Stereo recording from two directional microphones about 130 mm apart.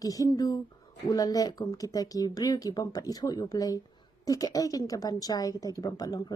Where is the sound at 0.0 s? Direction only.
30° left (ahead or behind).